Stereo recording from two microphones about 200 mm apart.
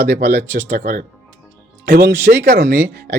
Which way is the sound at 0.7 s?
45° right (ahead or behind).